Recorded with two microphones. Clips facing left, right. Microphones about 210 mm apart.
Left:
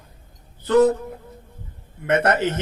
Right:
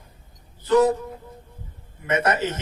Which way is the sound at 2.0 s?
60° left (ahead or behind).